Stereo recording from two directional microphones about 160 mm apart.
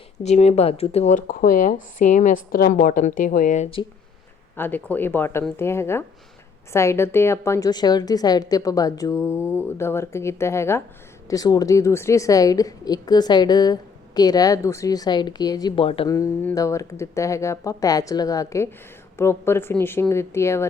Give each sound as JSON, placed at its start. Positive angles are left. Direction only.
{"t": 0.2, "sound": "speech", "side_deg": 45}
{"t": 4.5, "sound": "a woman's voice", "side_deg": 10}
{"t": 16.0, "sound": "a woman's voice", "side_deg": 20}